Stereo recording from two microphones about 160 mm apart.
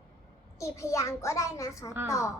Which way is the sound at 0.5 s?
20° left (ahead or behind).